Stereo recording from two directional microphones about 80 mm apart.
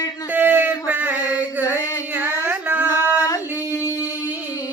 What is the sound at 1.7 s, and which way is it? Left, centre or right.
Music, left.